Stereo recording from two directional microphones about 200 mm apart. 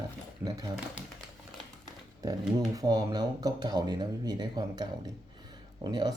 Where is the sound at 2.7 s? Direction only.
20° right (ahead or behind).